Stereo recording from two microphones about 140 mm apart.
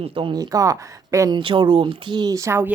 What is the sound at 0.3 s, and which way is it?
Speech, 25° right (ahead or behind).